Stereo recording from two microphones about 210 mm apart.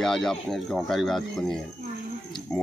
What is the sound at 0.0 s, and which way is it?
Speech, centre (ahead or behind).